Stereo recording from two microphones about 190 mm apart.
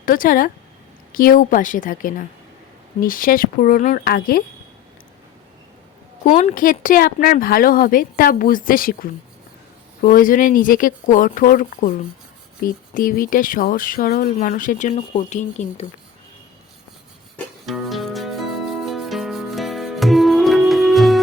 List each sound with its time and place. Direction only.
0.0 s speech: 45° left (ahead or behind)
6.2 s speech: 45° left (ahead or behind)
17.3 s music: centre (ahead or behind)